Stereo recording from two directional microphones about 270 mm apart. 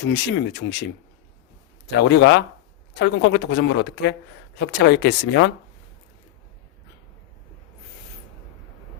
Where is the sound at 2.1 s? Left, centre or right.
Left.